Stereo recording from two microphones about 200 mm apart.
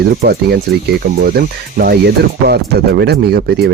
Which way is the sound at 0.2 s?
55° right (ahead or behind).